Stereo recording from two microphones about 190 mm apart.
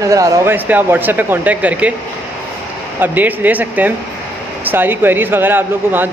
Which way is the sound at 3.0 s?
10° right (ahead or behind).